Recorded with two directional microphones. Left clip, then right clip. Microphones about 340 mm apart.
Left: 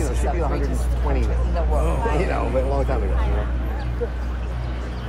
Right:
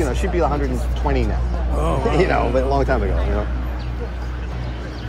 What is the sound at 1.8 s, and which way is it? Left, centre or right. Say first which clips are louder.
A man's voice: right 9 dB; right.